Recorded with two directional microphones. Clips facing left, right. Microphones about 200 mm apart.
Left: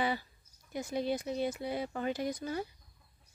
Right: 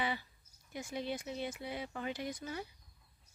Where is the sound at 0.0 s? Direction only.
40° left (ahead or behind).